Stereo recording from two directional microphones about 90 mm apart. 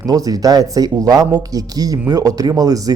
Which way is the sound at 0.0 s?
40° right (ahead or behind).